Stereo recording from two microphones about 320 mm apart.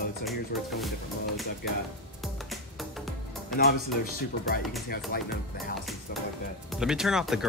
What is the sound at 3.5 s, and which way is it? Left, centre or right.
Speech, left.